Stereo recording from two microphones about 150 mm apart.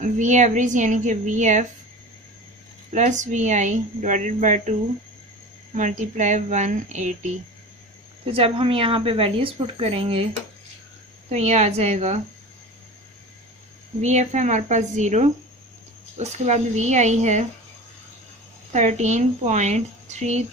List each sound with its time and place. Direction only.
0.0 s a woman's voice: 55° right (ahead or behind)
2.9 s a woman's voice: 50° right (ahead or behind)
5.7 s a woman's voice: 55° right (ahead or behind)
8.3 s a woman's voice: 40° right (ahead or behind)
11.3 s a woman's voice: 45° right (ahead or behind)
14.0 s a woman's voice: 50° right (ahead or behind)
18.7 s a woman's voice: 50° right (ahead or behind)